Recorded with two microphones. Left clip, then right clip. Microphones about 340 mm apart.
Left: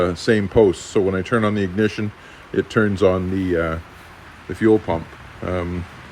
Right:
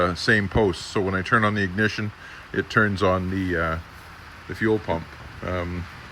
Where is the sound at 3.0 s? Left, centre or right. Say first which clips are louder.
Left 5 dB; left.